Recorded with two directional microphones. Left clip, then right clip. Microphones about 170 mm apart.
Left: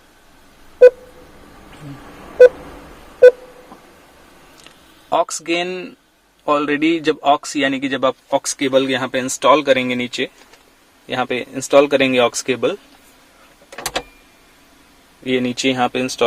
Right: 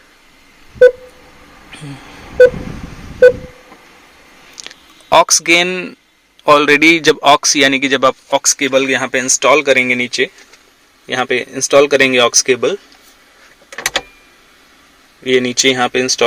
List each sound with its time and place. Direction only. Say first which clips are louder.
4.6 s a sound: right 9 dB; 25° right (ahead or behind)
6.4 s a man's voice: right 9 dB; 25° right (ahead or behind)
15.2 s a man's voice: right 7 dB; 15° right (ahead or behind)